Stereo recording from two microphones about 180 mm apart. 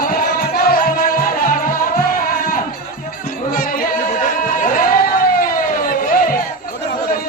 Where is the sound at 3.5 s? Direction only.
55° left (ahead or behind).